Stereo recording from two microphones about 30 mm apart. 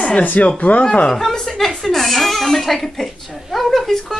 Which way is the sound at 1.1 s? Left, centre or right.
Centre.